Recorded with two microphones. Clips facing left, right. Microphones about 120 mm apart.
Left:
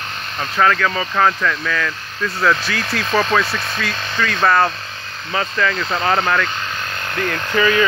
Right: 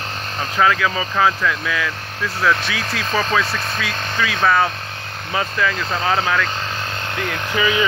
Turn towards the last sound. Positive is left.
turn(degrees=-15)  # may be behind; listen again after turning